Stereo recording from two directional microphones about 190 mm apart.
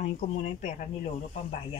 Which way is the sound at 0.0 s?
35° left (ahead or behind).